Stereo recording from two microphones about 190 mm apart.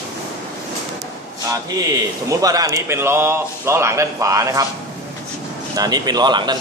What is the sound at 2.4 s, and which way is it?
Speech, 20° right (ahead or behind).